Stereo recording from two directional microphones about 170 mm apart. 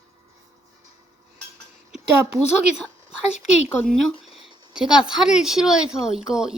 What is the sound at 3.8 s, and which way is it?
Speech, 5° left (ahead or behind).